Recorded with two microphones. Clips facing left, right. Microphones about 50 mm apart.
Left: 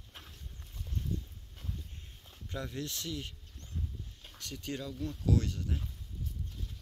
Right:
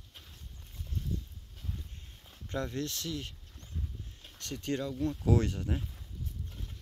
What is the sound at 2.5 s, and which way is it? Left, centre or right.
Speech, centre.